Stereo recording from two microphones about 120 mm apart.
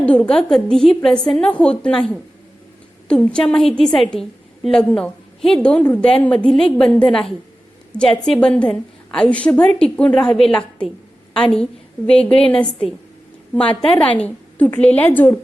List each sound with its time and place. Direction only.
0.0 s a woman's voice: 10° left (ahead or behind)
13.7 s a woman's voice: 45° left (ahead or behind)
14.0 s a woman's voice: 10° left (ahead or behind)